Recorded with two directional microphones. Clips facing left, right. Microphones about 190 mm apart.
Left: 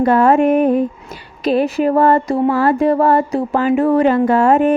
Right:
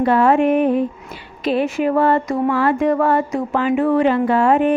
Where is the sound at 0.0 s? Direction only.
45° left (ahead or behind).